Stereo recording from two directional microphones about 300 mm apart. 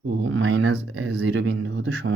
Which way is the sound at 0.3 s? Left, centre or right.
Right.